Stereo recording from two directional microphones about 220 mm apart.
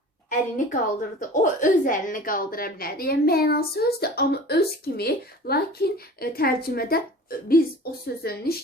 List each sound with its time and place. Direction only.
0.3 s a woman's voice: 35° left (ahead or behind)